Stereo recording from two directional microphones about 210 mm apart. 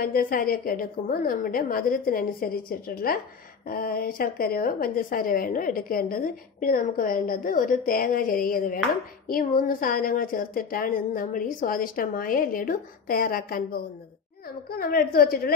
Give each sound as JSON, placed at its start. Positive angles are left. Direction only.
{"t": 0.0, "sound": "a woman's voice", "side_deg": 45}
{"t": 14.7, "sound": "a woman's voice", "side_deg": 45}